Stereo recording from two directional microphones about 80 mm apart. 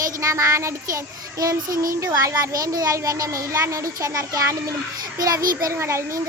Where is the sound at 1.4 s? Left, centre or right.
Right.